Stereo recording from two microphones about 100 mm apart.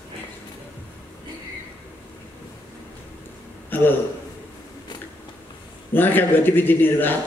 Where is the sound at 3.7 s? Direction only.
20° left (ahead or behind).